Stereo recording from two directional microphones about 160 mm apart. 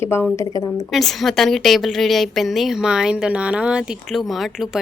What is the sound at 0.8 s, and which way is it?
A woman's voice, centre (ahead or behind).